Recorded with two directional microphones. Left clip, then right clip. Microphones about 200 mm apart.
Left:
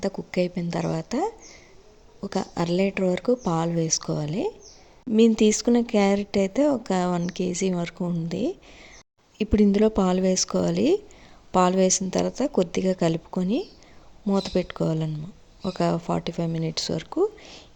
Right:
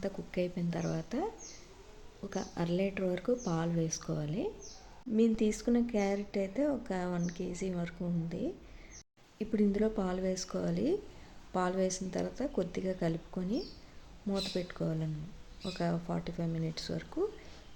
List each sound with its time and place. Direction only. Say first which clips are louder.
0.0 s speech: left 10 dB; 35° left (ahead or behind)